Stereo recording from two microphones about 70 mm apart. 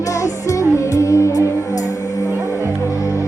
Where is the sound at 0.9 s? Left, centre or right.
Left.